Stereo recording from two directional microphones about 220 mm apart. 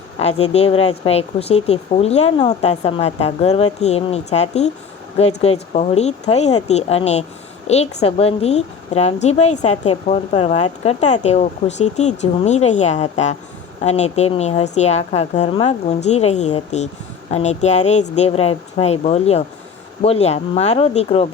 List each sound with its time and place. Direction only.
0.2 s speech: 30° left (ahead or behind)